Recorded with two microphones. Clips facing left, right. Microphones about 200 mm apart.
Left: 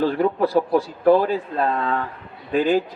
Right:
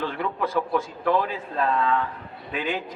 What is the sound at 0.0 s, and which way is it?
A man's voice, 35° left (ahead or behind).